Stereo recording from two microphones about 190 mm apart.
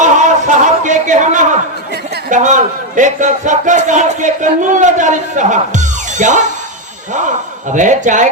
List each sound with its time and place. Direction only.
0.0 s a sound: 40° right (ahead or behind)
2.3 s speech: 40° right (ahead or behind)
7.7 s speech: 40° right (ahead or behind)